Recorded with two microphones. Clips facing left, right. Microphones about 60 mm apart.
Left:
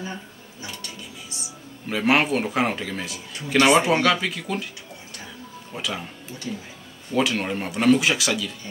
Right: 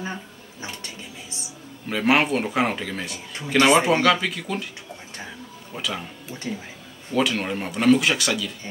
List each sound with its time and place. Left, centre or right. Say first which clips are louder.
0.0 s dishes: right 2 dB; right
1.9 s speech: even; centre
5.7 s speech: even; centre
6.5 s speech: right 1 dB; right
7.2 s speech: even; centre